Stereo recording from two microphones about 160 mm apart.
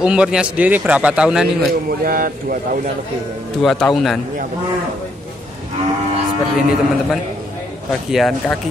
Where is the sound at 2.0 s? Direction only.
65° right (ahead or behind).